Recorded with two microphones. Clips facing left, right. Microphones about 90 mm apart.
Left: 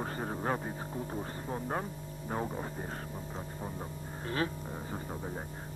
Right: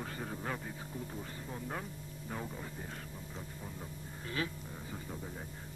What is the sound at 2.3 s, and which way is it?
Speech, 40° left (ahead or behind).